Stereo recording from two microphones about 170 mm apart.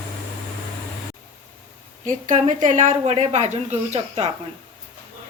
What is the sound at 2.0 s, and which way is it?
Speech, 45° right (ahead or behind).